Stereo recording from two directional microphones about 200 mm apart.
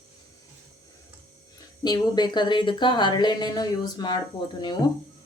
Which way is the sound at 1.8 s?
20° left (ahead or behind).